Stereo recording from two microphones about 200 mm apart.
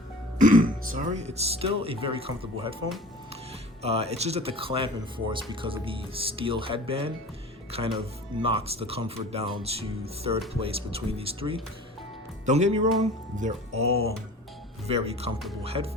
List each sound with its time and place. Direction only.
0.3 s speech: 40° right (ahead or behind)
3.8 s speech: 30° right (ahead or behind)